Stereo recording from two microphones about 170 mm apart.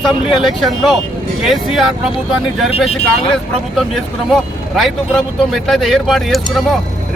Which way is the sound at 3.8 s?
Centre (ahead or behind).